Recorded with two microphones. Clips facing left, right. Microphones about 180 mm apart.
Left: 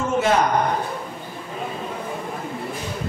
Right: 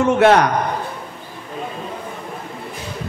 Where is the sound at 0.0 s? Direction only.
70° right (ahead or behind).